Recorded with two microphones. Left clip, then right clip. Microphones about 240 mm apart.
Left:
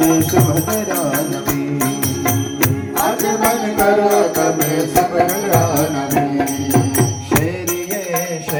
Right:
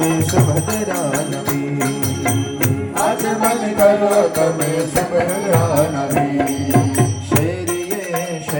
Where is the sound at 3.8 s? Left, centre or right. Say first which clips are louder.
Right 1 dB; left.